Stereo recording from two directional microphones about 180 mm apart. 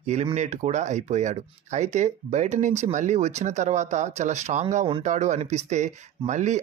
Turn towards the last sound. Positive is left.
turn(degrees=-40)  # may be behind; listen again after turning